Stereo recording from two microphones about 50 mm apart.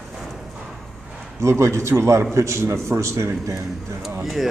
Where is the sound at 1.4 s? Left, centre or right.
Right.